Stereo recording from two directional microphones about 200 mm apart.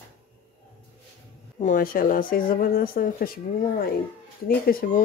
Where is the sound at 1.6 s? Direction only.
40° left (ahead or behind).